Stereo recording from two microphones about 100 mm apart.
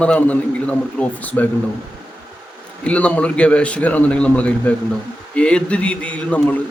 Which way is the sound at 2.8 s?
10° left (ahead or behind).